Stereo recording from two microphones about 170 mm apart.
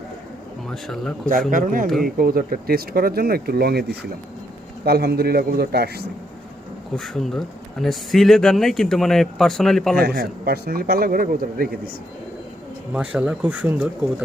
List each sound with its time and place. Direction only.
0.7 s speech: 5° left (ahead or behind)
1.5 s a man's voice: 50° right (ahead or behind); by 6.1 s 70° right (ahead or behind)
6.9 s speech: 5° left (ahead or behind)
10.0 s speech: 65° right (ahead or behind)
12.9 s speech: 5° right (ahead or behind)